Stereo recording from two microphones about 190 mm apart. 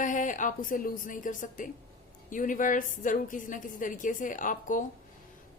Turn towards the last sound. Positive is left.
turn(degrees=45)  # may be behind; listen again after turning